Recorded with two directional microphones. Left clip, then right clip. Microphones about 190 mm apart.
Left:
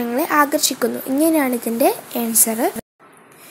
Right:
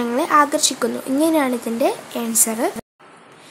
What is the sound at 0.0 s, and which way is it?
A woman's voice, 10° left (ahead or behind).